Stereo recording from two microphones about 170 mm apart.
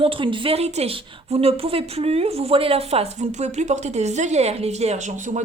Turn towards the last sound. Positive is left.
turn(degrees=-45)  # may be behind; listen again after turning